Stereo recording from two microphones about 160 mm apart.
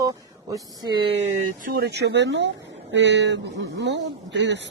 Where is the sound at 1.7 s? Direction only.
90° right.